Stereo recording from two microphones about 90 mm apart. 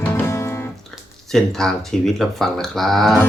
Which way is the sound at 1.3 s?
5° left (ahead or behind).